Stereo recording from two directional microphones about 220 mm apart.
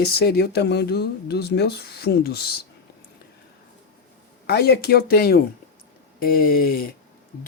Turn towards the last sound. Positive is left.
turn(degrees=40)  # may be behind; listen again after turning